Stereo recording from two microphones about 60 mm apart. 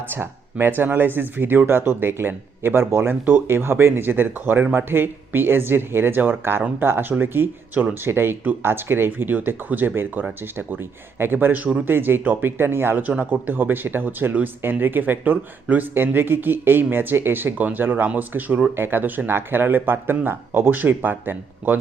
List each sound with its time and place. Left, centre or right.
0.6 s speech: right
13.0 s speech: right